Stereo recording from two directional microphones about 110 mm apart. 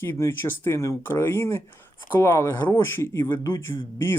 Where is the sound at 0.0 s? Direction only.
20° left (ahead or behind).